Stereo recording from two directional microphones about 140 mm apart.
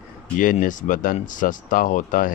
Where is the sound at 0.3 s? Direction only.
70° left (ahead or behind).